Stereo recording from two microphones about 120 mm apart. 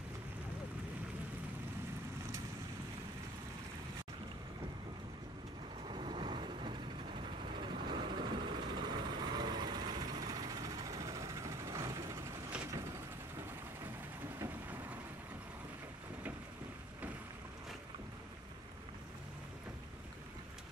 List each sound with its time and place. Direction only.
5.9 s vehicle: 45° right (ahead or behind); by 12.4 s 25° right (ahead or behind)